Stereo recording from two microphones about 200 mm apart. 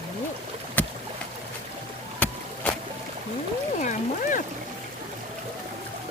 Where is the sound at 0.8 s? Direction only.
10° left (ahead or behind).